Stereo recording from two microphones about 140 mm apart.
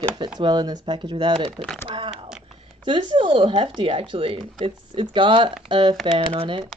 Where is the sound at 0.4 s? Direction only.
30° right (ahead or behind).